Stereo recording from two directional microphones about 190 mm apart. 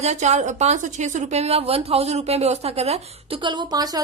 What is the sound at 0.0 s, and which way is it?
A woman's voice, 35° right (ahead or behind).